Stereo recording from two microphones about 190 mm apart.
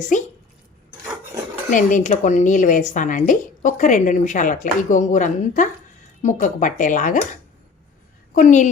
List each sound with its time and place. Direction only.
0.1 s a woman's voice: 40° left (ahead or behind)
1.7 s speech: 40° left (ahead or behind)
8.4 s a woman's voice: 40° left (ahead or behind)